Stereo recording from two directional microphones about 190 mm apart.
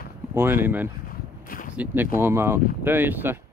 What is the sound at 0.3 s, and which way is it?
Speech, 10° right (ahead or behind).